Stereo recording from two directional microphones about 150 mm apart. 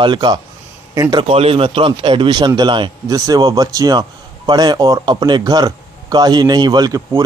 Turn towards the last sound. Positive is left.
turn(degrees=-25)  # may be behind; listen again after turning